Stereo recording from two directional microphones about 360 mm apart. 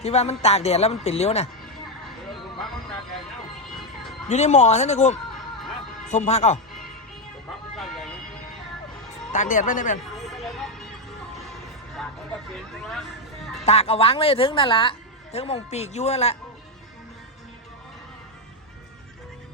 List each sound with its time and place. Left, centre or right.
0.0 s speech: centre
4.3 s speech: centre
7.8 s vehicle: centre
9.3 s speech: left
10.2 s music: centre
12.0 s music: centre
12.5 s speech: centre
13.7 s speech: centre